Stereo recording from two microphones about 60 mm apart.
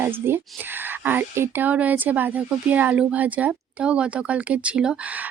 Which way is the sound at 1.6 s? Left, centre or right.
Right.